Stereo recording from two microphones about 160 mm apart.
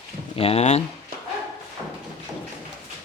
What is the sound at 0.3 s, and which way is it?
Speech, 40° left (ahead or behind).